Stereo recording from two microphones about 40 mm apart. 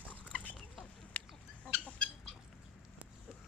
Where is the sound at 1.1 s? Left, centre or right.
Left.